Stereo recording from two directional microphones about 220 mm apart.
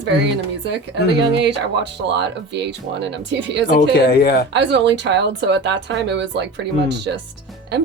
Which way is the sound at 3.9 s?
45° left (ahead or behind).